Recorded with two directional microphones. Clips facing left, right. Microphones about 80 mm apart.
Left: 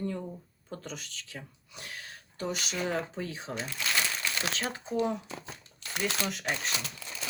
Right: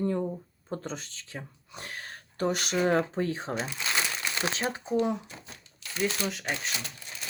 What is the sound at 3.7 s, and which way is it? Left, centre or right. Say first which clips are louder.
Crumpling: right 1 dB; right.